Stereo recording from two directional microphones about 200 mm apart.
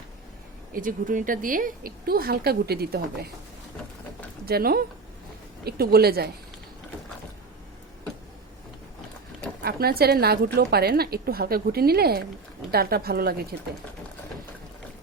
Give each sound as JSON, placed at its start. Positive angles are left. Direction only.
{"t": 0.7, "sound": "a woman's voice", "side_deg": -40}
{"t": 4.4, "sound": "a woman's voice", "side_deg": -50}
{"t": 9.6, "sound": "a woman's voice", "side_deg": -50}